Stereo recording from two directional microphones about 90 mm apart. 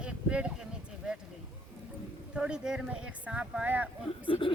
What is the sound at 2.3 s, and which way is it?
Speech, 10° right (ahead or behind).